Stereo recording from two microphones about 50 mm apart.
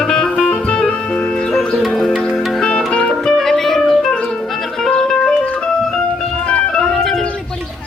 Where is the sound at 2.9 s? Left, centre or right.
Left.